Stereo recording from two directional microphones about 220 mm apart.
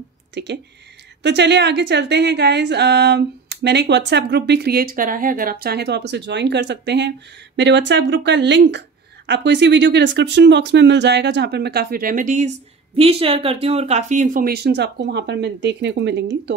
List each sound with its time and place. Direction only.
0.3 s a woman's voice: 50° right (ahead or behind)
12.9 s a woman's voice: 25° right (ahead or behind); by 16.5 s 50° right (ahead or behind)